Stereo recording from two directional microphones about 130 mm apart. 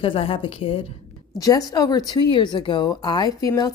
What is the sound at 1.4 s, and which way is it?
Speech, 25° left (ahead or behind).